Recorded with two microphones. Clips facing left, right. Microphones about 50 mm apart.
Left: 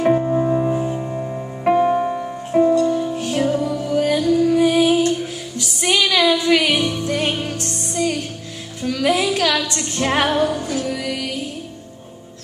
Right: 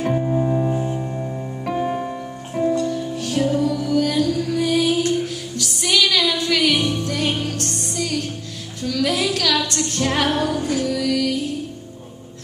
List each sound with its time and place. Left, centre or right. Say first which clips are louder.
0.0 s music: left 4 dB; left
1.6 s music: left 8 dB; left